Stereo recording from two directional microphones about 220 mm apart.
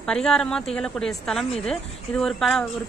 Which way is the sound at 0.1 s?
5° left (ahead or behind).